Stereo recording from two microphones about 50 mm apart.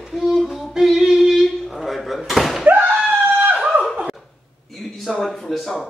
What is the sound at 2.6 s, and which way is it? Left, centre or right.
Screaming, right.